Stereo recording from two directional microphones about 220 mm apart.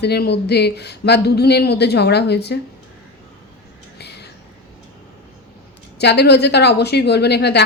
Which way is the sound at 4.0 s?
50° left (ahead or behind).